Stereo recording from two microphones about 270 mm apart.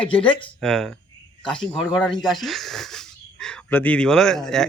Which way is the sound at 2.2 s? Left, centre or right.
Centre.